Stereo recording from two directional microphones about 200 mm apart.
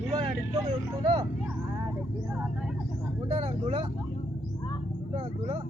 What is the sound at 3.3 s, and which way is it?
Vehicle, 25° right (ahead or behind).